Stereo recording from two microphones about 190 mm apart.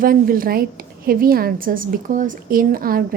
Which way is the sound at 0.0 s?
50° right (ahead or behind).